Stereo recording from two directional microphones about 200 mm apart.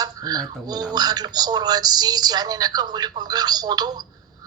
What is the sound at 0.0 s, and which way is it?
Speech, 20° right (ahead or behind).